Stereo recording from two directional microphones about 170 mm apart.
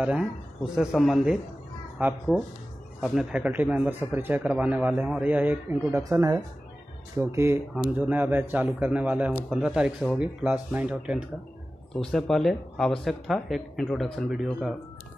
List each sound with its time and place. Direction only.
0.0 s speech: 5° right (ahead or behind)